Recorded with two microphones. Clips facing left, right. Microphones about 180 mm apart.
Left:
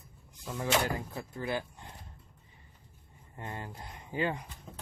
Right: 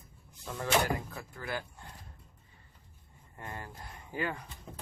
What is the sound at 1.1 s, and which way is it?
Speech, 20° left (ahead or behind).